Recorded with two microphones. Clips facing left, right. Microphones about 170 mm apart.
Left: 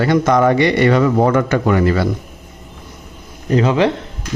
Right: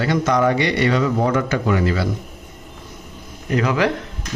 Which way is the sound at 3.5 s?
25° left (ahead or behind).